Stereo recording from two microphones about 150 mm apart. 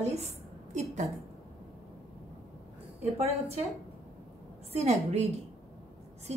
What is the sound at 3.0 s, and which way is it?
Speech, 45° right (ahead or behind).